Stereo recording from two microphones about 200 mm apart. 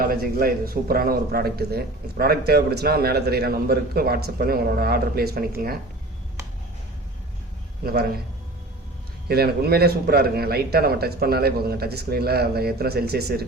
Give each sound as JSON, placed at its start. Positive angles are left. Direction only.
{"t": 0.0, "sound": "a man's voice", "side_deg": -45}
{"t": 7.9, "sound": "a man's voice", "side_deg": -50}
{"t": 9.3, "sound": "a man's voice", "side_deg": -50}